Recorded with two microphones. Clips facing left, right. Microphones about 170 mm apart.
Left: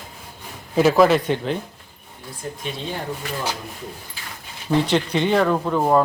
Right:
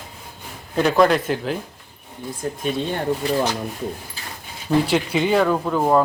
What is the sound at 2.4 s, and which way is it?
Speech, 50° right (ahead or behind).